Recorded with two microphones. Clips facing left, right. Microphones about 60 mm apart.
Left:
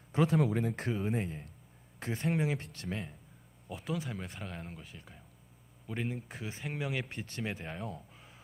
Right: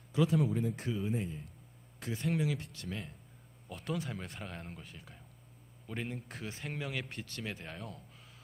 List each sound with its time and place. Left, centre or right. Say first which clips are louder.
0.3 s speech: left 2 dB; left
2.2 s speech: left 1 dB; left
3.7 s speech: left 1 dB; centre